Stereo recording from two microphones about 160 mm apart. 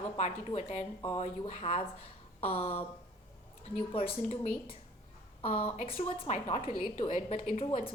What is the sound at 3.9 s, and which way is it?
A woman's voice, 40° left (ahead or behind).